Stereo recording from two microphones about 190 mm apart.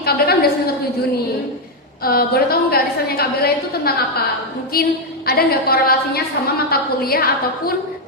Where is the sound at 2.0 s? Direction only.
50° left (ahead or behind).